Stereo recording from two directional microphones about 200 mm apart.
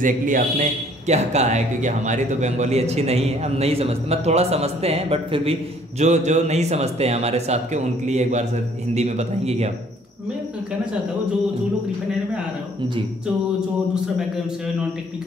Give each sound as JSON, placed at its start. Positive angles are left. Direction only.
{"t": 0.0, "sound": "a man's voice", "side_deg": -40}